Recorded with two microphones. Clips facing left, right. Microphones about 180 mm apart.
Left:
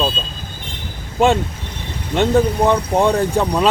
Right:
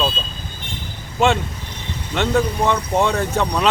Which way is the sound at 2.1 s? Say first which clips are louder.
Left 4 dB; 15° left (ahead or behind).